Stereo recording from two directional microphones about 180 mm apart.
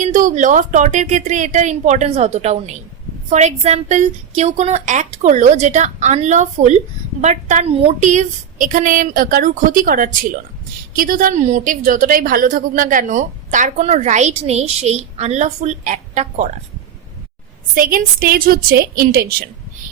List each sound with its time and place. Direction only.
0.0 s a woman's voice: 45° right (ahead or behind)
17.7 s a woman's voice: 50° right (ahead or behind)